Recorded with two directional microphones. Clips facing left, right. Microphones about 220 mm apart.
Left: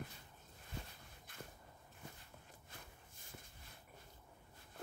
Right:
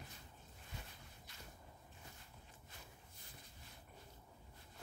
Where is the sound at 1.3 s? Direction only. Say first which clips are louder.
Left 9 dB; 55° left (ahead or behind).